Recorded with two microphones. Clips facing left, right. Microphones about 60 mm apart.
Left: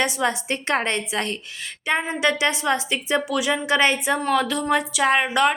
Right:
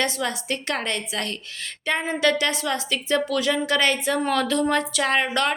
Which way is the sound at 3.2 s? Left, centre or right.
Centre.